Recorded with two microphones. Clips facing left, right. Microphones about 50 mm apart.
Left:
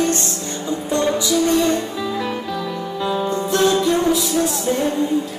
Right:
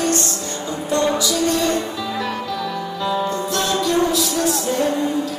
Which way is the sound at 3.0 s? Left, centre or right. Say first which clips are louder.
Even; centre.